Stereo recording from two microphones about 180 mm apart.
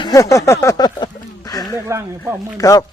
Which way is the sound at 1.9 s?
10° right (ahead or behind).